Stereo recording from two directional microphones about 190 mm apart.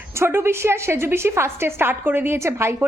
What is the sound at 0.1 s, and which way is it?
A woman's voice, 15° right (ahead or behind).